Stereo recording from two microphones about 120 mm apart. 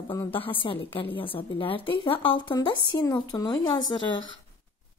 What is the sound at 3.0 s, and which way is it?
Speech, 30° left (ahead or behind).